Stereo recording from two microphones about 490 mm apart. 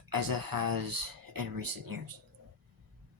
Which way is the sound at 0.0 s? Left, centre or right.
Right.